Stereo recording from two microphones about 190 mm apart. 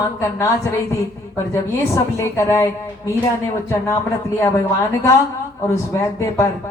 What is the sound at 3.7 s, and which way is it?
Speech, 15° left (ahead or behind).